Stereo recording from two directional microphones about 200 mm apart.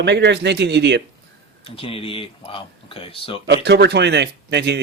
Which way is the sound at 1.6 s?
30° left (ahead or behind).